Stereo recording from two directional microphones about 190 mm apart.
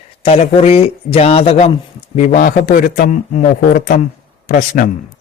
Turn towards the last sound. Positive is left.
turn(degrees=45)  # may be behind; listen again after turning